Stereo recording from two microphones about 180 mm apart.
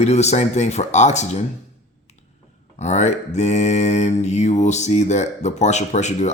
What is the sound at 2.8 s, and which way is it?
Mantra, 40° left (ahead or behind).